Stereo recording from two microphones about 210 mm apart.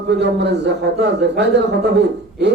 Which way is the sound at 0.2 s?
55° right (ahead or behind).